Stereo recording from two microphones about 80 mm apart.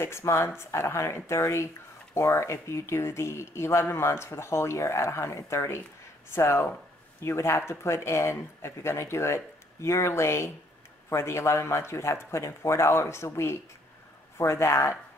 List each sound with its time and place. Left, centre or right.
0.0 s speech: left